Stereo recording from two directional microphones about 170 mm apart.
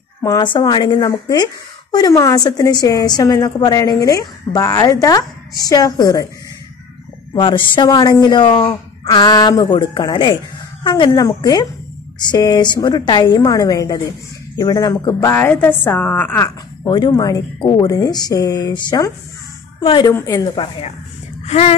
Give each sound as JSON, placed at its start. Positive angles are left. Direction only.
{"t": 0.2, "sound": "a woman's voice", "side_deg": 25}
{"t": 7.3, "sound": "a woman's voice", "side_deg": 30}
{"t": 16.8, "sound": "a woman's voice", "side_deg": 25}
{"t": 21.5, "sound": "speech", "side_deg": 40}